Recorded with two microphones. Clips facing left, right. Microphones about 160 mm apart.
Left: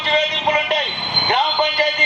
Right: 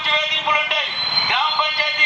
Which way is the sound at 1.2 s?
45° left (ahead or behind).